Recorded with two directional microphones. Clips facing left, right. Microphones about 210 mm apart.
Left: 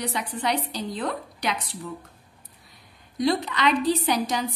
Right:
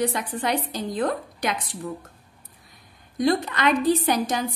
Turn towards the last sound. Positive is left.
turn(degrees=-50)  # may be behind; listen again after turning